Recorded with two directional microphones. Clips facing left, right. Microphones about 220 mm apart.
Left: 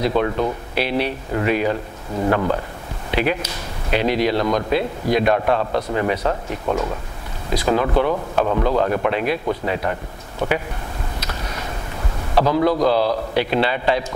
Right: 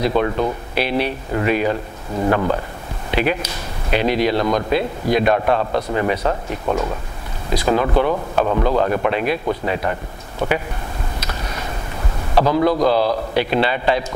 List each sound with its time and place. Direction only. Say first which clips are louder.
0.1 s a man's voice: right 1 dB; 25° right (ahead or behind)
0.7 s a man's voice: right 1 dB; 15° right (ahead or behind)
11.1 s a sound: right 1 dB; 15° right (ahead or behind)
12.4 s a man's voice: right 1 dB; 25° right (ahead or behind)
13.3 s speech: right 1 dB; 15° right (ahead or behind)